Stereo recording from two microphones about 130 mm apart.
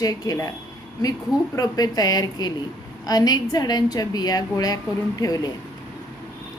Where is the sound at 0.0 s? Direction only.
25° left (ahead or behind).